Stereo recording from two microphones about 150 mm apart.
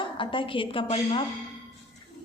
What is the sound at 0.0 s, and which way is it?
A woman's voice, 35° left (ahead or behind).